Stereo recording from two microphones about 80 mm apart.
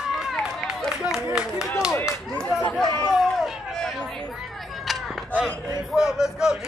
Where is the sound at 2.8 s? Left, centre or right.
Left.